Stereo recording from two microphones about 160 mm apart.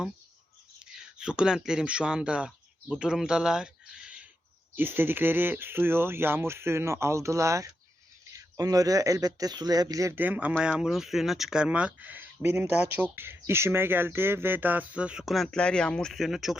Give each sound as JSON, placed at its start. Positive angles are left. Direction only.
{"t": 0.8, "sound": "speech", "side_deg": -5}